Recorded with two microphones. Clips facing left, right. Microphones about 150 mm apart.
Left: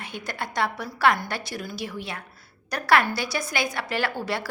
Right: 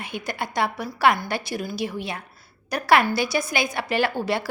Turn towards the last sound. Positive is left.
turn(degrees=-15)  # may be behind; listen again after turning